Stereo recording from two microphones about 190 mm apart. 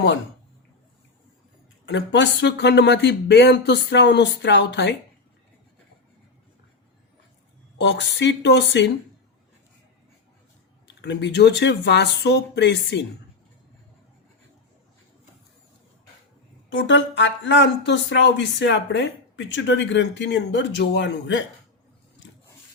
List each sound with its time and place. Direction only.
1.9 s speech: 70° left (ahead or behind)
7.8 s speech: 65° left (ahead or behind)
10.8 s speech: 65° left (ahead or behind)
16.6 s speech: 75° left (ahead or behind)